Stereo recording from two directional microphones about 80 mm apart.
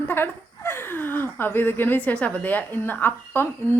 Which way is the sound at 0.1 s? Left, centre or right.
Left.